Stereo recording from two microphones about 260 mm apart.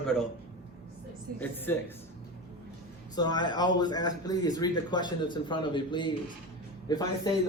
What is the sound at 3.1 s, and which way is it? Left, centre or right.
Speech, centre.